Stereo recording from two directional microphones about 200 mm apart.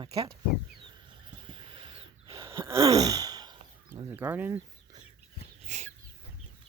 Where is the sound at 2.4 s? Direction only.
15° right (ahead or behind).